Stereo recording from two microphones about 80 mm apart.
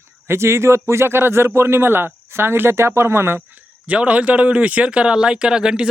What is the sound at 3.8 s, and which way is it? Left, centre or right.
Speech, centre.